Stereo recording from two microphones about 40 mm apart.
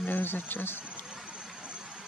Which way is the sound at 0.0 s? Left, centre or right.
Left.